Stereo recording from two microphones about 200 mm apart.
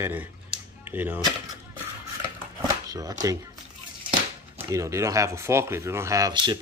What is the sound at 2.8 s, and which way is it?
Speech, 20° right (ahead or behind).